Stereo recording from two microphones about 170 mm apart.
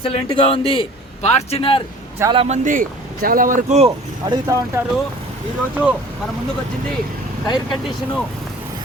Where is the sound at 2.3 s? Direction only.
35° right (ahead or behind).